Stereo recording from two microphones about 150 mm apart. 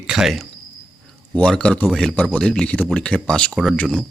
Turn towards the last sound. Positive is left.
turn(degrees=5)  # may be behind; listen again after turning